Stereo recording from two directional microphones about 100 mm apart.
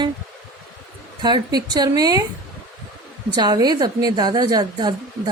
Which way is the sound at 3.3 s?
40° right (ahead or behind).